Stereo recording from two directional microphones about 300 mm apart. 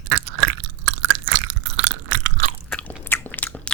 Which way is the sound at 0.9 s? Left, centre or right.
Right.